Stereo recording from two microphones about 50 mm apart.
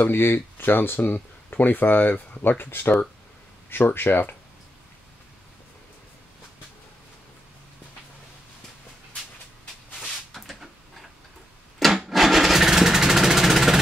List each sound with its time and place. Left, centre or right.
0.1 s speech: left
9.9 s a sound: centre
12.1 s engine starting: centre